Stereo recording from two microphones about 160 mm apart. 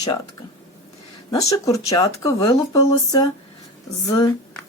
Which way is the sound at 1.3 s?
20° left (ahead or behind).